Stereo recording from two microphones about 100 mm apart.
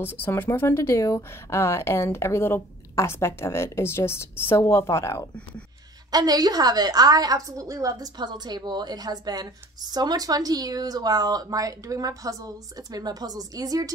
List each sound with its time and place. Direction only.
0.0 s speech: 20° left (ahead or behind)
6.1 s a woman's voice: 40° right (ahead or behind)